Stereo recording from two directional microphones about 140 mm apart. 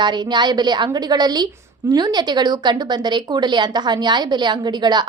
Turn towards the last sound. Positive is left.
turn(degrees=-30)  # may be behind; listen again after turning